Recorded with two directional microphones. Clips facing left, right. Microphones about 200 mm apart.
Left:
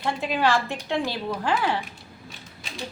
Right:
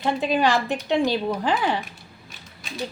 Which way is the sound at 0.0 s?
15° right (ahead or behind).